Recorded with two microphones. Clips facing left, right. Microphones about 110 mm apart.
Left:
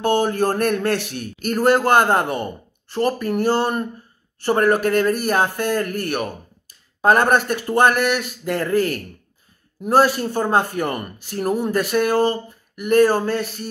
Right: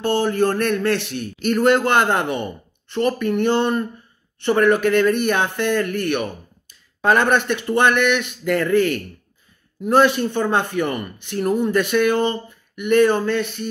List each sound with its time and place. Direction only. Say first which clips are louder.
0.0 s a man's voice: even; 50° left (ahead or behind)